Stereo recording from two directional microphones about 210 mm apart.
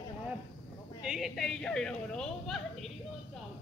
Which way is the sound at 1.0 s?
Centre (ahead or behind).